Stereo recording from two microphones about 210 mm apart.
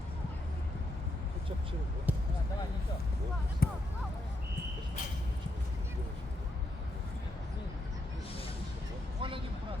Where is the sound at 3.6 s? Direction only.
45° left (ahead or behind).